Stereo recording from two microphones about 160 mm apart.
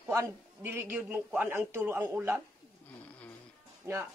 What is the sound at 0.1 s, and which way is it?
A man's voice, 15° right (ahead or behind).